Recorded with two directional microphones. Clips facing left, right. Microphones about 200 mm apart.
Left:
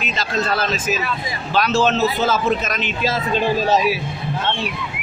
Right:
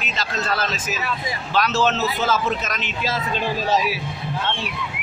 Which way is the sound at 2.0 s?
30° left (ahead or behind).